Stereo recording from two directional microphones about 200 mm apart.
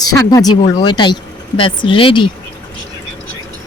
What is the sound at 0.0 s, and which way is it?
Speech, 20° left (ahead or behind).